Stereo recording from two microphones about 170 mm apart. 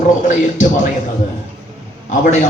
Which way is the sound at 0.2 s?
50° left (ahead or behind).